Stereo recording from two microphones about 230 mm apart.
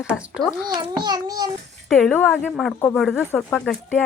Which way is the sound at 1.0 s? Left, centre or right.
Centre.